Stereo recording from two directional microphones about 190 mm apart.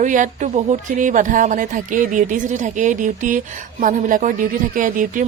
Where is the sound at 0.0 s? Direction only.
40° right (ahead or behind).